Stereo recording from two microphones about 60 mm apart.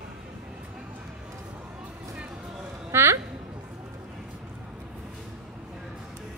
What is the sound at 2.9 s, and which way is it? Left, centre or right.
Music, right.